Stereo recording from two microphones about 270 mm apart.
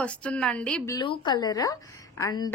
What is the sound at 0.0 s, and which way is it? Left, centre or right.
A woman's voice, centre.